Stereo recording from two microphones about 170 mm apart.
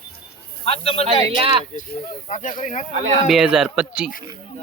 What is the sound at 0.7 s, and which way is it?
Speech, 35° left (ahead or behind).